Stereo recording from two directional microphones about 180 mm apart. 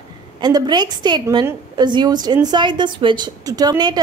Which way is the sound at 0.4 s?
20° right (ahead or behind).